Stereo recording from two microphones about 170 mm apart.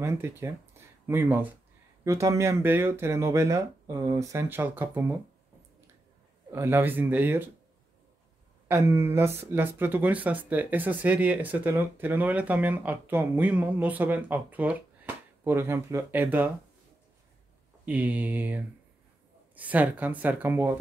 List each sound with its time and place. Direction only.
0.0 s speech: 15° right (ahead or behind)
6.5 s speech: 15° right (ahead or behind)
8.6 s speech: 15° right (ahead or behind)
17.8 s speech: 10° right (ahead or behind)